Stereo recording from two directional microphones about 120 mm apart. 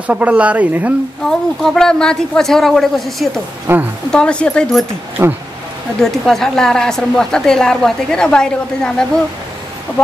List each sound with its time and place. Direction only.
0.0 s speech: 10° right (ahead or behind)
1.6 s a woman's voice: 5° left (ahead or behind)
3.7 s a woman's voice: 20° right (ahead or behind)
4.1 s speech: 5° left (ahead or behind)
5.9 s a woman's voice: 5° left (ahead or behind)